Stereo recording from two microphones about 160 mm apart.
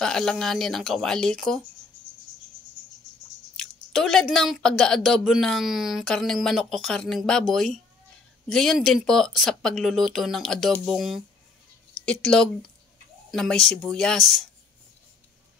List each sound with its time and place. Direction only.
0.0 s speech: 5° left (ahead or behind)
3.5 s speech: centre (ahead or behind)